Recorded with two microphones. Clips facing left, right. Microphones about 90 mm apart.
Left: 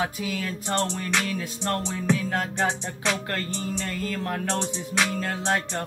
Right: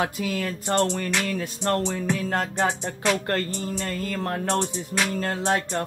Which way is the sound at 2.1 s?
45° right (ahead or behind).